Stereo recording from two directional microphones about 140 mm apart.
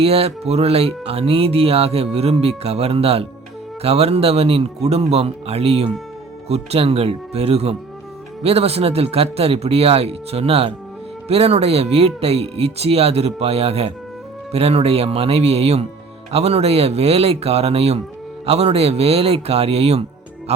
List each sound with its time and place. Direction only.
0.0 s speech: 45° right (ahead or behind)